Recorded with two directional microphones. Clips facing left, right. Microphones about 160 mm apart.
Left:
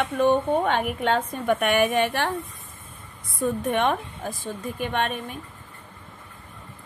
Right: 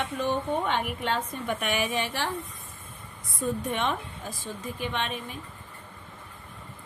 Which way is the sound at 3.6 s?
55° left (ahead or behind).